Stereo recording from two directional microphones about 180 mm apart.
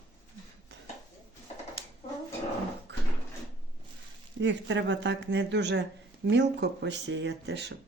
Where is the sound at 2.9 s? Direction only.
75° right (ahead or behind).